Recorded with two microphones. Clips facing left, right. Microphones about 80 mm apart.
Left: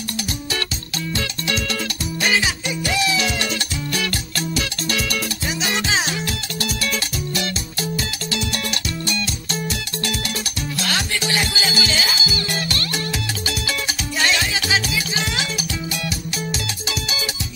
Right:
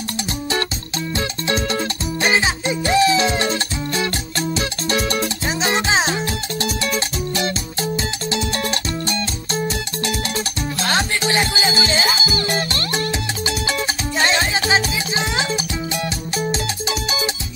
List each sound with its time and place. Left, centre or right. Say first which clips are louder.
1.1 s music: right 4 dB; right